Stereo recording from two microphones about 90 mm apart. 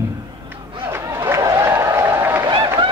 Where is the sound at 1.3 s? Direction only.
30° right (ahead or behind).